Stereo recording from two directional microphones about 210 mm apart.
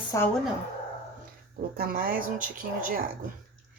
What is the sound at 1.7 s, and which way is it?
Speech, 45° right (ahead or behind).